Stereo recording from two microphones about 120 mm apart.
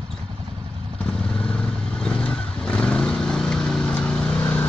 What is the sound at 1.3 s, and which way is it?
Vehicle, 5° left (ahead or behind).